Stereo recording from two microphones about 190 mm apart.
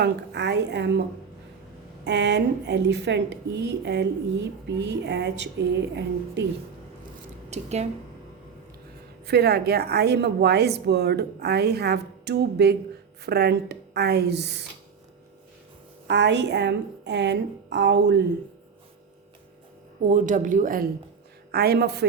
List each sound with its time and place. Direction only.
0.0 s a woman's voice: 65° right (ahead or behind)
2.0 s a woman's voice: 65° right (ahead or behind)
7.5 s speech: 35° right (ahead or behind)
9.2 s a woman's voice: 60° right (ahead or behind)
16.0 s a woman's voice: 65° right (ahead or behind)
20.1 s speech: 40° right (ahead or behind)
21.5 s a woman's voice: 55° right (ahead or behind)